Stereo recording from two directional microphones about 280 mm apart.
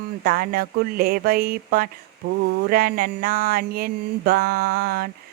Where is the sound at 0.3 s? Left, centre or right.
Right.